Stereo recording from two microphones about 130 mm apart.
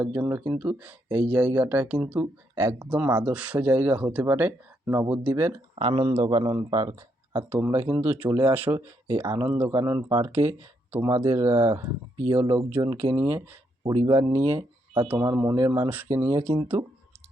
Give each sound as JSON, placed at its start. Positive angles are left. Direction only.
{"t": 0.0, "sound": "speech", "side_deg": -15}
{"t": 5.7, "sound": "a man's voice", "side_deg": -40}
{"t": 6.9, "sound": "speech", "side_deg": -20}